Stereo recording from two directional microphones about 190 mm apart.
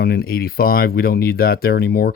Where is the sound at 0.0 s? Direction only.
50° left (ahead or behind).